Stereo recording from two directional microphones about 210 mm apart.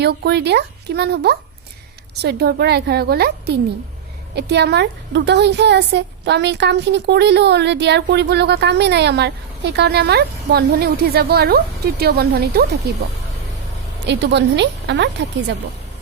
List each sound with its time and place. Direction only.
0.0 s a woman's voice: 50° right (ahead or behind)
14.0 s a woman's voice: 55° right (ahead or behind)